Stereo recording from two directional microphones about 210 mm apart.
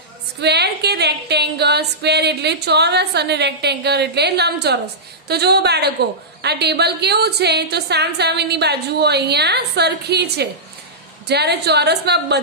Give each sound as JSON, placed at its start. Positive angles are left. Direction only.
{"t": 0.4, "sound": "a woman's voice", "side_deg": -50}